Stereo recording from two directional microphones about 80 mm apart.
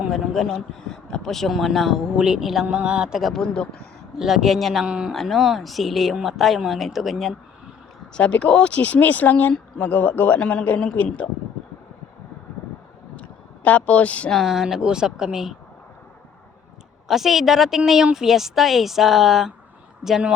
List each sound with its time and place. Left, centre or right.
0.1 s speech: centre
2.6 s speech: centre
4.2 s speech: centre
4.9 s speech: centre
5.1 s speech: centre
8.1 s speech: centre
13.1 s a sound: centre
14.3 s speech: centre
17.1 s speech: centre